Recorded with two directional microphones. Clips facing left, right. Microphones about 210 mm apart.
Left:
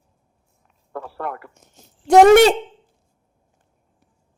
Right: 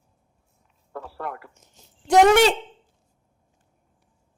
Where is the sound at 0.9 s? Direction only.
60° left (ahead or behind).